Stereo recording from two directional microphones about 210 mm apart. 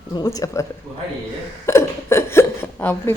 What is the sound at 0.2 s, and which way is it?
Speech, 15° left (ahead or behind).